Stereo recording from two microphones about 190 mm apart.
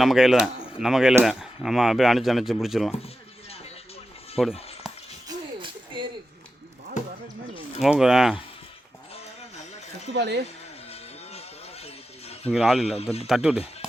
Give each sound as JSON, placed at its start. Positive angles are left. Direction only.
{"t": 0.0, "sound": "speech", "side_deg": 0}
{"t": 4.4, "sound": "speech", "side_deg": 0}
{"t": 5.3, "sound": "a sound", "side_deg": -25}
{"t": 7.0, "sound": "music", "side_deg": 40}
{"t": 7.8, "sound": "speech", "side_deg": -5}
{"t": 9.1, "sound": "a sound", "side_deg": 35}
{"t": 10.2, "sound": "speech", "side_deg": -60}
{"t": 10.4, "sound": "a sound", "side_deg": 35}
{"t": 12.5, "sound": "speech", "side_deg": 0}